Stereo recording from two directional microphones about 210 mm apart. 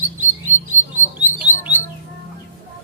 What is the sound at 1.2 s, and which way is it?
Bird, 10° right (ahead or behind).